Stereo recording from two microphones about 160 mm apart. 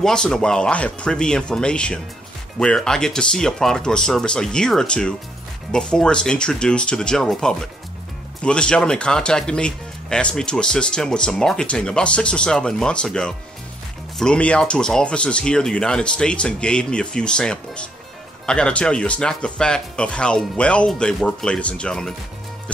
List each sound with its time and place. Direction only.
0.0 s speech: 5° left (ahead or behind)